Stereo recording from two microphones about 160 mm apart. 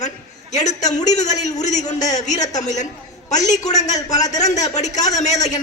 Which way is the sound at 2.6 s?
50° left (ahead or behind).